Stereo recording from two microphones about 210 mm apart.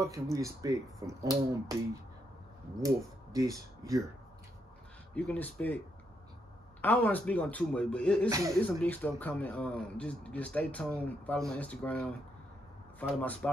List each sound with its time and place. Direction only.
0.0 s speech: 15° right (ahead or behind)
3.3 s speech: 15° right (ahead or behind)
5.1 s speech: 5° left (ahead or behind)
6.8 s a man's voice: 10° left (ahead or behind)
8.3 s speech: 15° right (ahead or behind)
8.6 s speech: 10° left (ahead or behind)